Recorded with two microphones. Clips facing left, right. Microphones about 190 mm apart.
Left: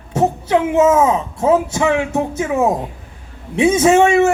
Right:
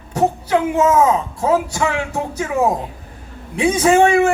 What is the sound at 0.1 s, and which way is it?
Speech, 25° left (ahead or behind).